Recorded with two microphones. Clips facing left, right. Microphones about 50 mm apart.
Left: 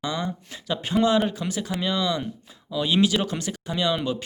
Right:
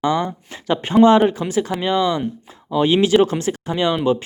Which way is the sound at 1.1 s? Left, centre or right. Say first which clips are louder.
Right 8 dB; right.